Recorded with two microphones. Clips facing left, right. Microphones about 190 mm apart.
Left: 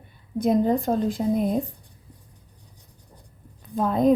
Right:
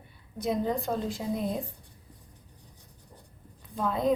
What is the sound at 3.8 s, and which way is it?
Speech, 45° left (ahead or behind).